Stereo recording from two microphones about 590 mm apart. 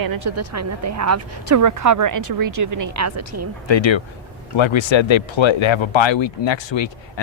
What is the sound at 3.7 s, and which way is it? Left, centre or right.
Speech, left.